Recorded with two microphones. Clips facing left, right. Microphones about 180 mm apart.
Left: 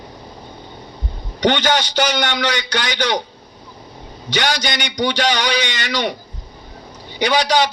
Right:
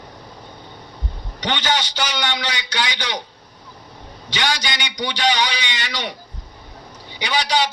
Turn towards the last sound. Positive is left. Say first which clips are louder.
# left 5 dB
turn(degrees=45)  # may be behind; listen again after turning